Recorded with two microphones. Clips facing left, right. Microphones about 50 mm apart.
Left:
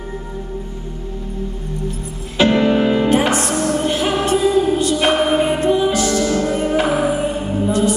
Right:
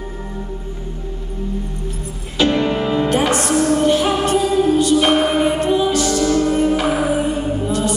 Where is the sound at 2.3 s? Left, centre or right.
Left.